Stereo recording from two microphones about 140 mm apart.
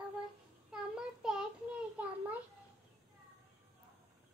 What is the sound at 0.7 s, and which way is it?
Child singing, 5° right (ahead or behind).